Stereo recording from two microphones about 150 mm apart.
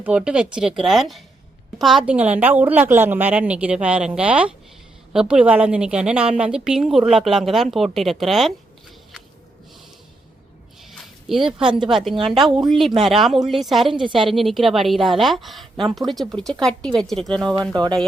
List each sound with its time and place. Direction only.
0.0 s a woman's voice: 5° right (ahead or behind)
10.9 s a sound: centre (ahead or behind)
12.1 s speech: 35° right (ahead or behind)
12.6 s a woman's voice: centre (ahead or behind)